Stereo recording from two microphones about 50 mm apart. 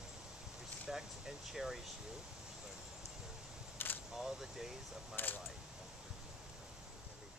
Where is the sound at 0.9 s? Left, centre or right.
Centre.